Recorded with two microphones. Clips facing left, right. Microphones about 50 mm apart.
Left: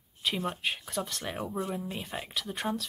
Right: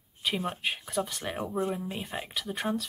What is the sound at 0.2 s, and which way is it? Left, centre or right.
Speech, centre.